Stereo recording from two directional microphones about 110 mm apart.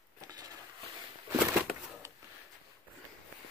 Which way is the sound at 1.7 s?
5° right (ahead or behind).